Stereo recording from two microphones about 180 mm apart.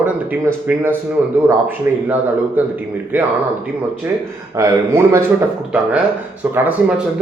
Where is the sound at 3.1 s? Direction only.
10° right (ahead or behind).